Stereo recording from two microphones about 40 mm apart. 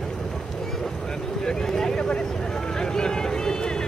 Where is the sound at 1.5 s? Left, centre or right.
Centre.